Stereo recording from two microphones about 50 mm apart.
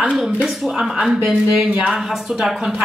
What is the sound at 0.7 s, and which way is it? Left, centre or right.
Speech, centre.